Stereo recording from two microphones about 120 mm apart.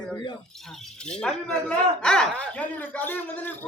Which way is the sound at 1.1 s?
5° left (ahead or behind).